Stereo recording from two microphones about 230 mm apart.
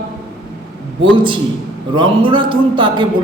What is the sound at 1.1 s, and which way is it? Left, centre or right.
A man's voice, right.